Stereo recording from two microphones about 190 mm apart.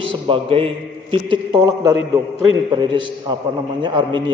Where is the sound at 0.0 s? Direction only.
30° right (ahead or behind).